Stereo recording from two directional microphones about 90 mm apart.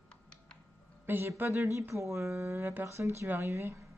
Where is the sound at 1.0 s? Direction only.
20° right (ahead or behind).